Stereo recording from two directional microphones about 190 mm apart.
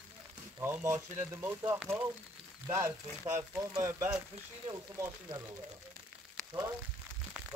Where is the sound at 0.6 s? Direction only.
15° right (ahead or behind).